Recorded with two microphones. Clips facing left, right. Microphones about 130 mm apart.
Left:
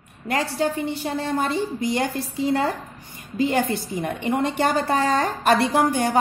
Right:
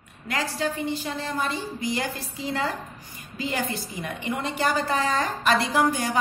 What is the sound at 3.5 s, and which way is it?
Speech, 30° left (ahead or behind).